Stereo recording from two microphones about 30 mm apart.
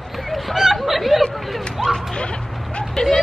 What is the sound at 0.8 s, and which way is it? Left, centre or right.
Chatter, centre.